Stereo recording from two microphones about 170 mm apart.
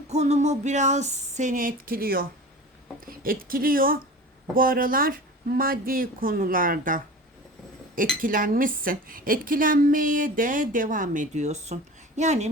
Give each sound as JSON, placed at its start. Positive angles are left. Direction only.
{"t": 0.1, "sound": "a woman's voice", "side_deg": -40}
{"t": 8.2, "sound": "a woman's voice", "side_deg": -55}